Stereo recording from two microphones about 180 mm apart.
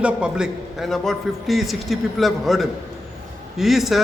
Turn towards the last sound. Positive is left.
turn(degrees=0)  # may be behind; listen again after turning